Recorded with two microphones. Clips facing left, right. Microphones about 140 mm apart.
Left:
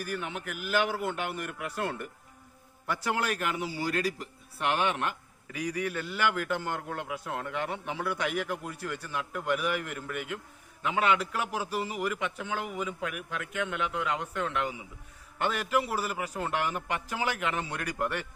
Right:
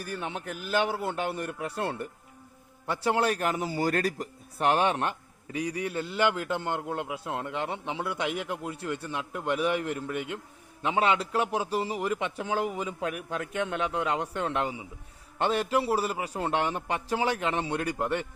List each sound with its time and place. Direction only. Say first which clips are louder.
0.0 s a man's voice: even; 30° right (ahead or behind)